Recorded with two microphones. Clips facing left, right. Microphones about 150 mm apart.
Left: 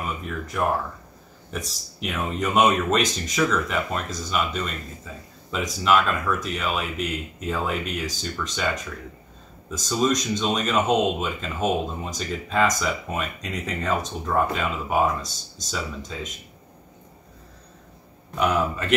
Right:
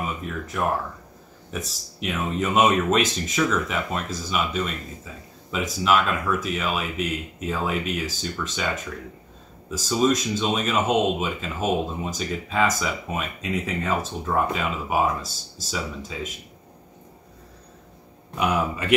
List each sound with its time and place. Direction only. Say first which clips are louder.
1.5 s speech: even; centre (ahead or behind)
9.7 s speech: right 2 dB; 5° right (ahead or behind)
18.4 s speech: left 1 dB; 10° right (ahead or behind)